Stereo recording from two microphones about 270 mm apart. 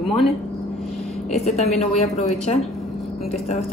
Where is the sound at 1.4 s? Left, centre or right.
Left.